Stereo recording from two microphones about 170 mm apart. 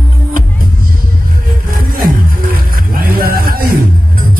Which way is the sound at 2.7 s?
60° right (ahead or behind).